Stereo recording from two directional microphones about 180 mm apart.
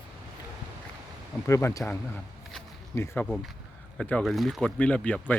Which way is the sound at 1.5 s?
15° left (ahead or behind).